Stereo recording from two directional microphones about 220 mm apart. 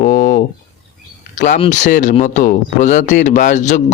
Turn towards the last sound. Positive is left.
turn(degrees=35)  # may be behind; listen again after turning